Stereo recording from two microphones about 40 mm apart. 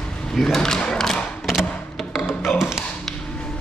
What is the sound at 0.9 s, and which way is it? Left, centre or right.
Thump, centre.